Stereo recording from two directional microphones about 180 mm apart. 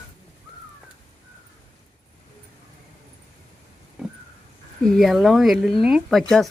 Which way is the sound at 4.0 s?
5° right (ahead or behind).